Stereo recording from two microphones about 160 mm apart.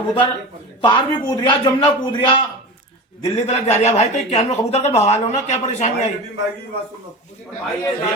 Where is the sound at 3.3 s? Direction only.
45° left (ahead or behind).